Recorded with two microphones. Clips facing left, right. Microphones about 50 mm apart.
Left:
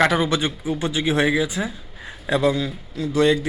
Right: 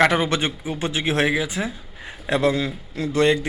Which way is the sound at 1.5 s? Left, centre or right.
Centre.